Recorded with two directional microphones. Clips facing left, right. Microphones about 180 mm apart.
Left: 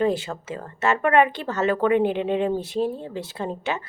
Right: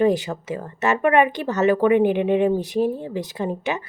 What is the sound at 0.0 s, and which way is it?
A woman's voice, 15° right (ahead or behind).